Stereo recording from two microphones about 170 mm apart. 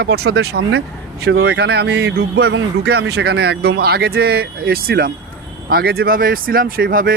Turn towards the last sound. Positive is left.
turn(degrees=-60)  # may be behind; listen again after turning